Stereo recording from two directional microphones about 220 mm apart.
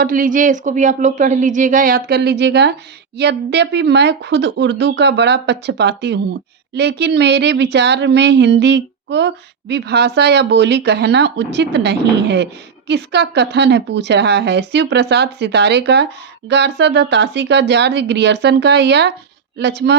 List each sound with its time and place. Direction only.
0.0 s speech: 40° right (ahead or behind)